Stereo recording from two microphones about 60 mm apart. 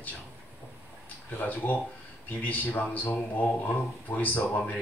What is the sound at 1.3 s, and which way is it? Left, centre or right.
Speech, left.